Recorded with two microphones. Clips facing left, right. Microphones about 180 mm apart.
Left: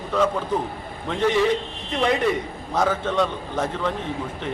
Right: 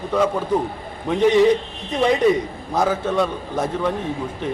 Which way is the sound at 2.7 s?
10° right (ahead or behind).